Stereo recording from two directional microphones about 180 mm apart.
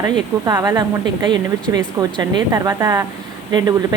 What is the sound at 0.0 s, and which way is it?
A woman's voice, 20° right (ahead or behind).